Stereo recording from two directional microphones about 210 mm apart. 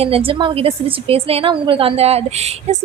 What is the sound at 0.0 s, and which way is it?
A woman's voice, 25° right (ahead or behind).